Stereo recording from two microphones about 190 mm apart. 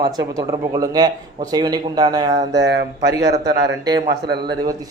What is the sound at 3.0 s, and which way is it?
Speech, 60° right (ahead or behind).